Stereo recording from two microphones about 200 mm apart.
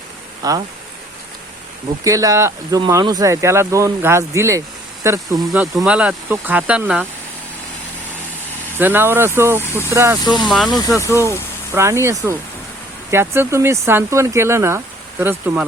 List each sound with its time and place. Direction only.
0.4 s speech: 20° right (ahead or behind)
2.0 s speech: 15° right (ahead or behind)
8.8 s speech: 10° right (ahead or behind)
10.4 s speech: centre (ahead or behind)
11.1 s speech: 15° right (ahead or behind)